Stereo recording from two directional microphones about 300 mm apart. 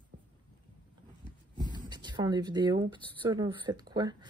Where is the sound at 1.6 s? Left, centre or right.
Centre.